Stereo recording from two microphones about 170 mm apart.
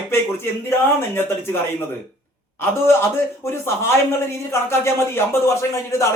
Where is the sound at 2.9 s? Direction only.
15° left (ahead or behind).